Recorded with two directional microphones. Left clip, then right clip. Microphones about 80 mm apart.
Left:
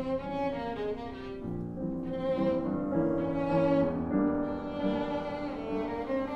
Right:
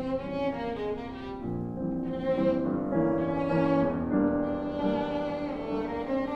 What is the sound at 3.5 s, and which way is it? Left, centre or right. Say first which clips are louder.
Music: left 1 dB; centre.